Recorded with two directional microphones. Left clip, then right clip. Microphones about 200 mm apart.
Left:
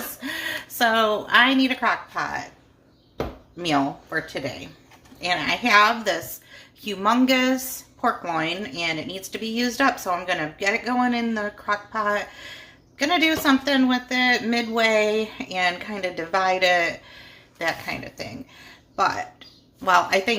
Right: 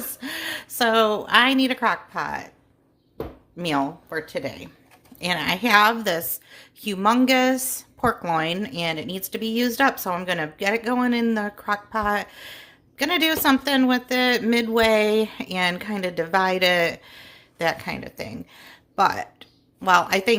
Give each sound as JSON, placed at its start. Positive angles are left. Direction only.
{"t": 0.2, "sound": "a woman's voice", "side_deg": -40}
{"t": 3.6, "sound": "a woman's voice", "side_deg": -50}